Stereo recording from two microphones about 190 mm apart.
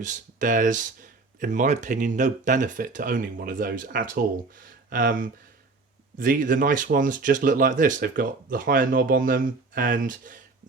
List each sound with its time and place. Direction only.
0.0 s speech: 40° right (ahead or behind)